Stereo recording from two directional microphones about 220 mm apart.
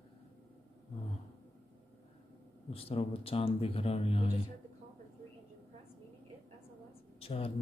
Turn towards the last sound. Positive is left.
turn(degrees=25)  # may be behind; listen again after turning